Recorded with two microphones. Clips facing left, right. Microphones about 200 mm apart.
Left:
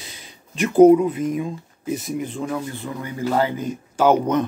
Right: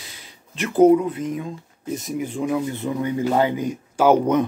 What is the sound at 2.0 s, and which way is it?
Speech, 10° right (ahead or behind).